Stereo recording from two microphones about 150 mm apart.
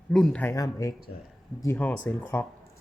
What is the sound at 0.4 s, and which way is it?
Speech, 25° left (ahead or behind).